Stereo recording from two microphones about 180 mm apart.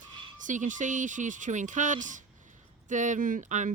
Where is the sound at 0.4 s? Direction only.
45° right (ahead or behind).